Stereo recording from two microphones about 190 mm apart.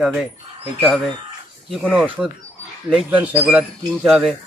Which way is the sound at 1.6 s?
Centre (ahead or behind).